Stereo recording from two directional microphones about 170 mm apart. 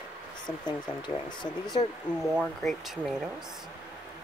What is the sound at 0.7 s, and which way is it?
Speech, 25° left (ahead or behind).